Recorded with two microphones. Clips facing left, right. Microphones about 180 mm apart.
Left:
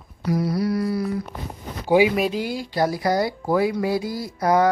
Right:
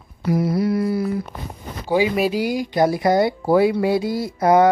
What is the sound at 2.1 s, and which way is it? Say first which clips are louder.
Speech: right 3 dB; 5° right (ahead or behind).